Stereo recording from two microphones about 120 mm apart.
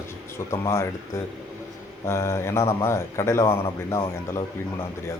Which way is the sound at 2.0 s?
20° left (ahead or behind).